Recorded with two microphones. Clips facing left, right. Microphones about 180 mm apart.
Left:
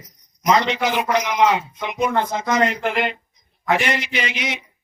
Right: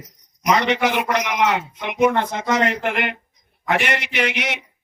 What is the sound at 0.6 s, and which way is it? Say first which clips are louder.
A man's voice: right 1 dB; 65° right (ahead or behind).